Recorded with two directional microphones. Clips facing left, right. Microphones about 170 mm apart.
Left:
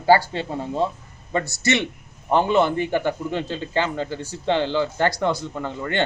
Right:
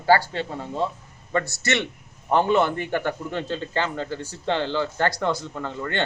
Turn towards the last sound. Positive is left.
turn(degrees=5)  # may be behind; listen again after turning